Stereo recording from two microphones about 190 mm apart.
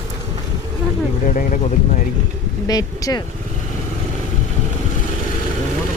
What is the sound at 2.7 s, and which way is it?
Speech, 20° left (ahead or behind).